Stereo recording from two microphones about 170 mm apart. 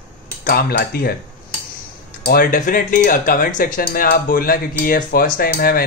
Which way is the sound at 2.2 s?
55° left (ahead or behind).